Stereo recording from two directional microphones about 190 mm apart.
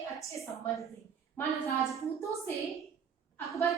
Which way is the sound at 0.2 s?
15° left (ahead or behind).